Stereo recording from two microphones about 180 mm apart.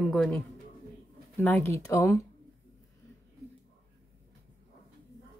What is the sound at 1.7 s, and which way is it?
Speech, 15° left (ahead or behind).